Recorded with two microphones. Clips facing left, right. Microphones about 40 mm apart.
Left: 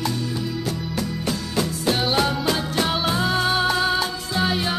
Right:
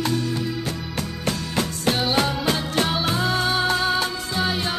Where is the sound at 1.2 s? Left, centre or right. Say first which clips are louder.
Right 2 dB; right.